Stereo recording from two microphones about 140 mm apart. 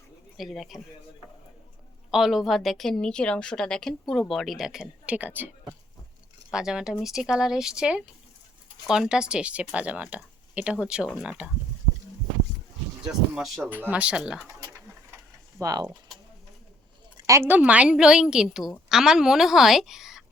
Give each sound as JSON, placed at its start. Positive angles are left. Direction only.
{"t": 0.3, "sound": "a woman's voice", "side_deg": 0}
{"t": 2.0, "sound": "a woman's voice", "side_deg": -5}
{"t": 6.5, "sound": "a woman's voice", "side_deg": -5}
{"t": 13.1, "sound": "a woman's voice", "side_deg": -5}
{"t": 15.5, "sound": "speech", "side_deg": -25}
{"t": 17.2, "sound": "a woman's voice", "side_deg": -20}